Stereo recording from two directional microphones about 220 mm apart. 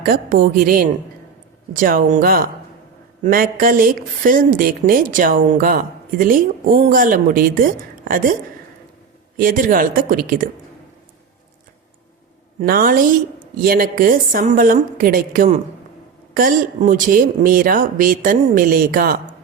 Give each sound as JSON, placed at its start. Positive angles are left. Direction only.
{"t": 0.0, "sound": "a woman's voice", "side_deg": -40}
{"t": 3.6, "sound": "a woman's voice", "side_deg": -40}
{"t": 9.4, "sound": "a woman's voice", "side_deg": -40}
{"t": 12.6, "sound": "a woman's voice", "side_deg": -40}